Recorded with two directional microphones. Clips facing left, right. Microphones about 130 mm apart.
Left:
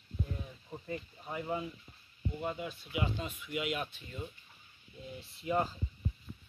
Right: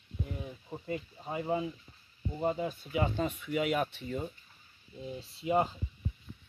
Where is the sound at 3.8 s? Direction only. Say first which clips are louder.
Right 8 dB; 70° right (ahead or behind).